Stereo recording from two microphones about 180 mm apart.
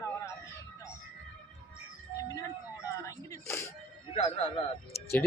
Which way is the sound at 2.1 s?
20° left (ahead or behind).